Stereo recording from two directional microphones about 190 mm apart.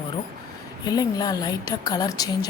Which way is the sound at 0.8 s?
20° left (ahead or behind).